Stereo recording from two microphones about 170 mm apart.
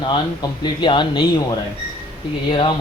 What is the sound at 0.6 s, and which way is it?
A man's voice, 30° left (ahead or behind).